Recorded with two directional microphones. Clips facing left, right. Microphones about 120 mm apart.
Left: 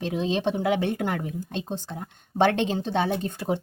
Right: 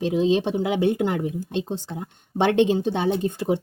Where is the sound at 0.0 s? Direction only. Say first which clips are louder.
Right 5 dB; 15° right (ahead or behind).